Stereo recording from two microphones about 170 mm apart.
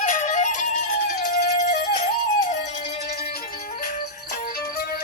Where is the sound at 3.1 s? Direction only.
60° left (ahead or behind).